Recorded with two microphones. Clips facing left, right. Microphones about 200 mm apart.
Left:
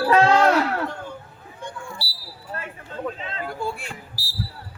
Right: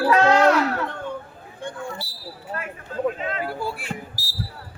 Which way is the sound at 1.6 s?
55° right (ahead or behind).